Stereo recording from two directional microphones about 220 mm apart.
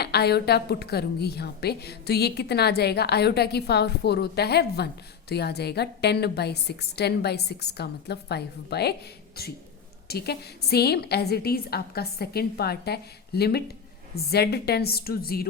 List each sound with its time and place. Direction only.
0.0 s a woman's voice: 45° left (ahead or behind)